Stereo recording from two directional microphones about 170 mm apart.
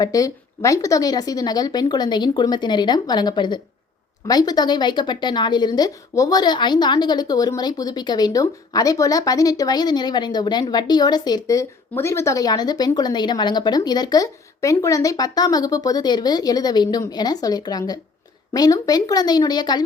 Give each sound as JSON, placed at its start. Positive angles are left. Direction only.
{"t": 0.0, "sound": "a woman's voice", "side_deg": 20}